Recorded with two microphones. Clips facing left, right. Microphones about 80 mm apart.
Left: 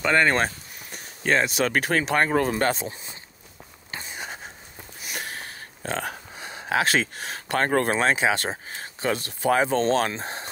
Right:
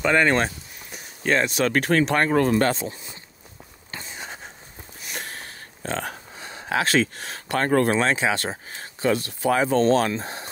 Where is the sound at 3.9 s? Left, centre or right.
Centre.